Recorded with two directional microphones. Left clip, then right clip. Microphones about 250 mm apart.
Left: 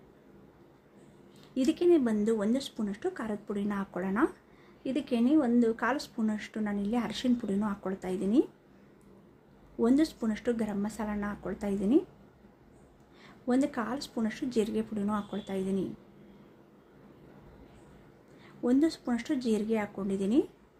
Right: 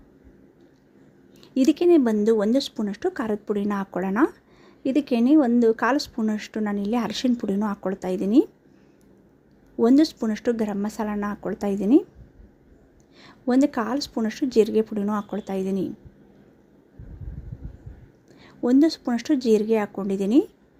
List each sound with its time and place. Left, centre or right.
1.5 s speech: right
9.7 s speech: right
13.1 s speech: right
18.3 s speech: right